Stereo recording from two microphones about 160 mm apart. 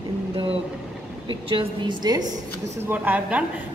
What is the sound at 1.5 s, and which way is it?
Speech, 35° right (ahead or behind).